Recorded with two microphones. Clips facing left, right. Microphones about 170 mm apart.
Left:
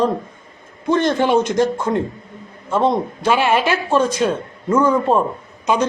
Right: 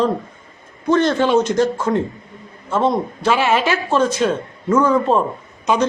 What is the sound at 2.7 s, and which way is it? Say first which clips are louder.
Speech: left 1 dB; 15° left (ahead or behind).